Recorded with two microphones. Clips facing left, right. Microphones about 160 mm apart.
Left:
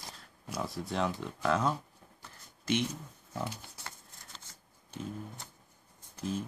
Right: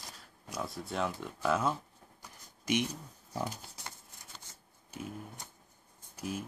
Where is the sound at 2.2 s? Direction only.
15° right (ahead or behind).